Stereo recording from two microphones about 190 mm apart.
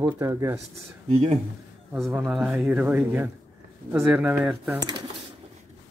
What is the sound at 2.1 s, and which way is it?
Speech, 5° right (ahead or behind).